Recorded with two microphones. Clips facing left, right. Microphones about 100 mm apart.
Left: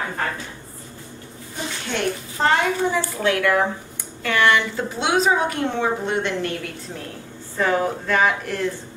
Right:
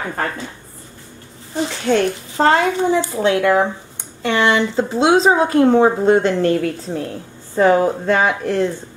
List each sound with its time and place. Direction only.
1.9 s a woman's voice: 45° right (ahead or behind)
2.3 s a woman's voice: 30° right (ahead or behind)